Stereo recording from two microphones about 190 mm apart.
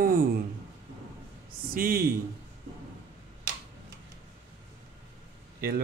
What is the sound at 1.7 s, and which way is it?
Speech, 50° right (ahead or behind).